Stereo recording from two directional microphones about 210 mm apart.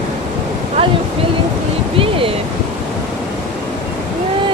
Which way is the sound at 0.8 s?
25° right (ahead or behind).